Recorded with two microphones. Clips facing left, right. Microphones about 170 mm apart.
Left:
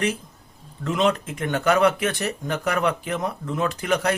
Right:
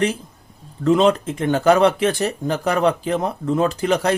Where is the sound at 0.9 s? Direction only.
35° right (ahead or behind).